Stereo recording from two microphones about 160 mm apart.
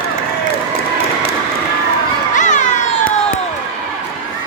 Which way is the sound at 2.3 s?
50° left (ahead or behind).